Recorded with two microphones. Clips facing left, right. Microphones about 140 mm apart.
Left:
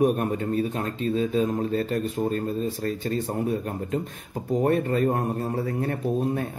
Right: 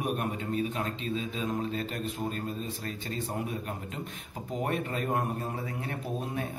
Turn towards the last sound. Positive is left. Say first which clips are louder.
# left 9 dB
turn(degrees=45)  # may be behind; listen again after turning